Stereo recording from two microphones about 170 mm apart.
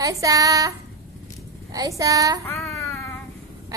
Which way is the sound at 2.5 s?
Centre (ahead or behind).